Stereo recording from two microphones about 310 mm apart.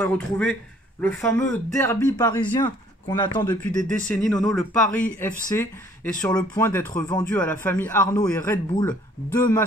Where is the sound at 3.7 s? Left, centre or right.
Centre.